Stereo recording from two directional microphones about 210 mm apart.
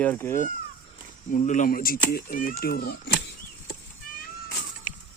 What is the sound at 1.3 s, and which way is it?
Speech, 35° left (ahead or behind).